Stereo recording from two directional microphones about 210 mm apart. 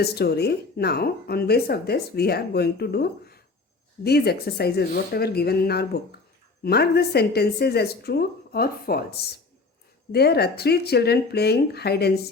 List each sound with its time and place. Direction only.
0.0 s speech: 50° left (ahead or behind)